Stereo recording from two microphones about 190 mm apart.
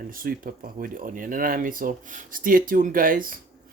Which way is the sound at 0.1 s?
45° right (ahead or behind).